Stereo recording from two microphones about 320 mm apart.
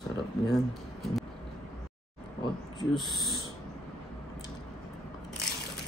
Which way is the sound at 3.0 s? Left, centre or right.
Centre.